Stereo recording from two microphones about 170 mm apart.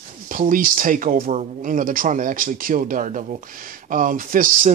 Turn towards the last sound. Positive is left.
turn(degrees=-55)  # may be behind; listen again after turning